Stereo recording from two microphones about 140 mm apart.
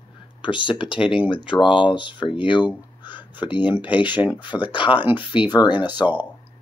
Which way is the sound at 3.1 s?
10° right (ahead or behind).